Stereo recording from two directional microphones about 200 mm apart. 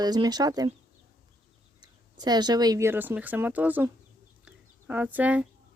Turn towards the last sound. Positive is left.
turn(degrees=-10)  # may be behind; listen again after turning